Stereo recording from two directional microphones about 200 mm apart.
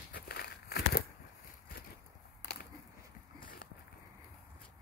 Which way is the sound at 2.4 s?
55° left (ahead or behind).